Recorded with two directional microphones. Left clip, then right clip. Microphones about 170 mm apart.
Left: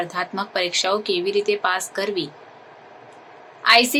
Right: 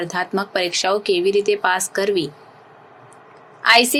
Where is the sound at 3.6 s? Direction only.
20° right (ahead or behind).